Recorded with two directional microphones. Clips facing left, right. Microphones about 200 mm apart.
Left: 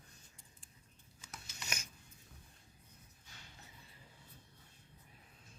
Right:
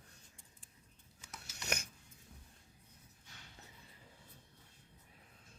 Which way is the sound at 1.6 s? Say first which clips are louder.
Right 7 dB; 60° right (ahead or behind).